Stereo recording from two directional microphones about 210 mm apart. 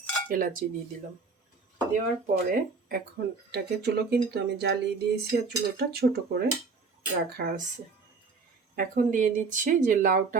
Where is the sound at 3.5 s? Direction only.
50° right (ahead or behind).